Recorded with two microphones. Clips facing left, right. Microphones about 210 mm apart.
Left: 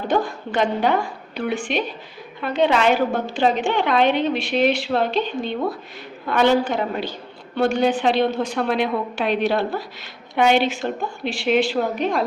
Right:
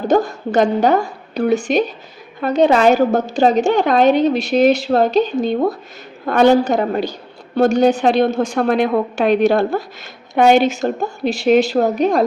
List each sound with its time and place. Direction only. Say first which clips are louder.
0.1 s a woman's voice: right 6 dB; 40° right (ahead or behind)